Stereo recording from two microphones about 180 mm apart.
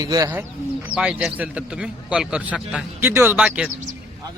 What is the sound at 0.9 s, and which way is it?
A man's voice, 5° right (ahead or behind).